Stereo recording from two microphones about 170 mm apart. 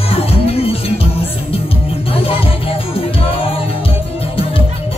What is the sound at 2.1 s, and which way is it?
Music, 35° left (ahead or behind).